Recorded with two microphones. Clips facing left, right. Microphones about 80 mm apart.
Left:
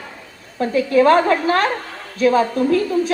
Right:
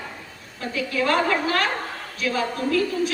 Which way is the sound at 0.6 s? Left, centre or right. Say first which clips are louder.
Left 11 dB; left.